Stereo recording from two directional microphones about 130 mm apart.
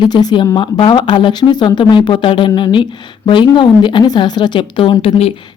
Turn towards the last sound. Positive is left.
turn(degrees=50)  # may be behind; listen again after turning